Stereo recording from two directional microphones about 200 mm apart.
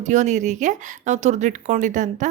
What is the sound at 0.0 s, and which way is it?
A woman's voice, 35° right (ahead or behind).